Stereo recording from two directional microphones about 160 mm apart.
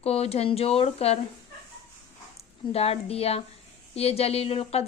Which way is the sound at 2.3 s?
40° left (ahead or behind).